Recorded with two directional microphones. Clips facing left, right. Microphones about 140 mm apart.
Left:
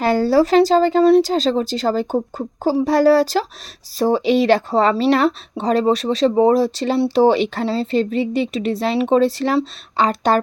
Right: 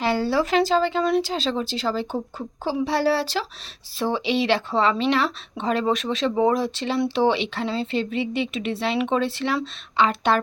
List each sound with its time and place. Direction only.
0.0 s speech: 45° left (ahead or behind)